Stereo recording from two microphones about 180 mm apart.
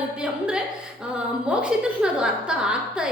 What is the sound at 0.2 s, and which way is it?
A woman's voice, 5° right (ahead or behind).